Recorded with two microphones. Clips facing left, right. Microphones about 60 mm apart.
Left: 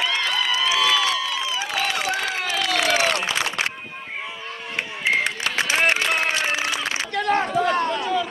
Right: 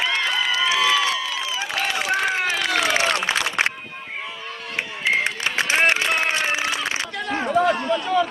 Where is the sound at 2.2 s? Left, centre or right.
Right.